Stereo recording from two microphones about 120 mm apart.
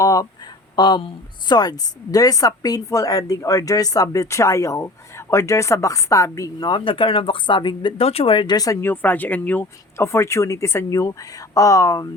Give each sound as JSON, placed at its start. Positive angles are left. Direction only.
{"t": 0.0, "sound": "speech", "side_deg": 30}
{"t": 6.7, "sound": "speech", "side_deg": 45}
{"t": 8.0, "sound": "speech", "side_deg": 50}
{"t": 8.8, "sound": "speech", "side_deg": 15}